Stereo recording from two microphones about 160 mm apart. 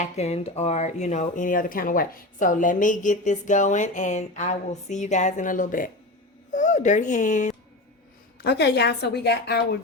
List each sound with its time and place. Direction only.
0.0 s speech: 40° left (ahead or behind)
8.4 s a woman's voice: 90° left